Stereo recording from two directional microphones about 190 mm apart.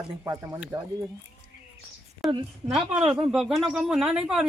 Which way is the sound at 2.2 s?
Centre (ahead or behind).